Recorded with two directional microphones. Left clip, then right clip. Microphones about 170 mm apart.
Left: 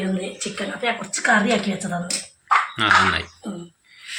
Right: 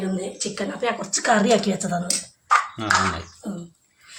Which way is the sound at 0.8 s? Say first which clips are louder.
Left 1 dB; 50° right (ahead or behind).